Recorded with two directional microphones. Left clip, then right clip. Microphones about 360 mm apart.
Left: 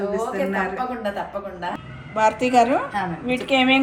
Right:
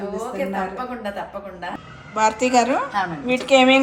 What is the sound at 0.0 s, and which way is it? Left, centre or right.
A woman's voice, centre.